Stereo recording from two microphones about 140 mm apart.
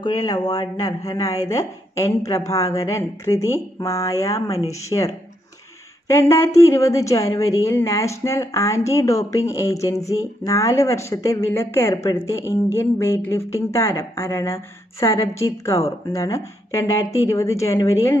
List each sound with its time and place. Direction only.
0.0 s a woman's voice: 30° left (ahead or behind)